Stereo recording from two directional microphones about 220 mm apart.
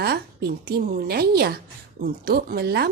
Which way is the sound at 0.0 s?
45° right (ahead or behind).